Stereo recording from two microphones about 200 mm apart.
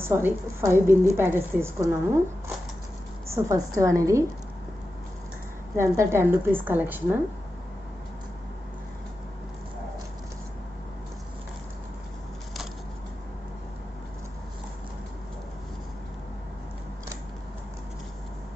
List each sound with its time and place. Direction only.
0.0 s a woman's voice: 10° right (ahead or behind)
3.3 s a woman's voice: 15° right (ahead or behind)
5.8 s a woman's voice: 15° right (ahead or behind)